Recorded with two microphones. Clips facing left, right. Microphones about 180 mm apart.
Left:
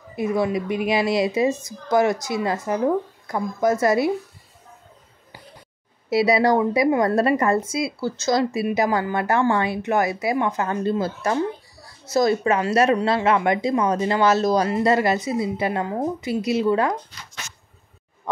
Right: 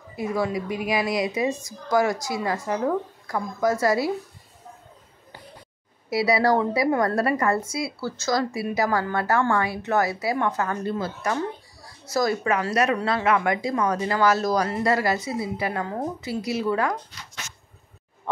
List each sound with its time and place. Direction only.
0.1 s a woman's voice: 20° left (ahead or behind)
6.0 s a woman's voice: 20° left (ahead or behind)